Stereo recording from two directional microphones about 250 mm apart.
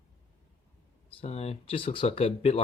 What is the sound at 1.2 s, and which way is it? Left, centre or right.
Speech, left.